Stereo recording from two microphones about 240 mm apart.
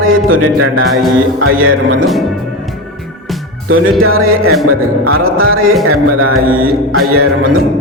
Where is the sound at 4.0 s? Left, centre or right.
Right.